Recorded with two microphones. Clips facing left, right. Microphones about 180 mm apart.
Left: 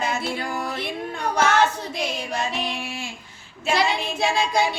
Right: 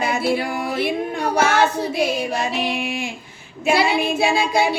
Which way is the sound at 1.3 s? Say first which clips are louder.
Right 2 dB; 10° right (ahead or behind).